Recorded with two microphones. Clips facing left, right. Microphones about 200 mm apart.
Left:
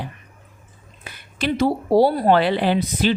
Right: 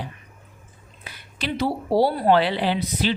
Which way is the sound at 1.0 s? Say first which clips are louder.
Left 6 dB; 50° left (ahead or behind).